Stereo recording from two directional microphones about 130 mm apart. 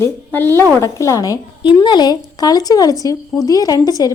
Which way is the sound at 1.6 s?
35° left (ahead or behind).